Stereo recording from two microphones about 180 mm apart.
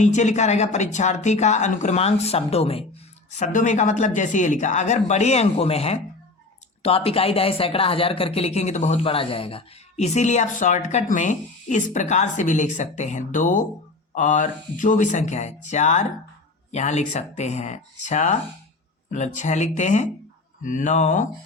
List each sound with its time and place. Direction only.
0.0 s speech: 40° left (ahead or behind)
3.3 s speech: 45° left (ahead or behind)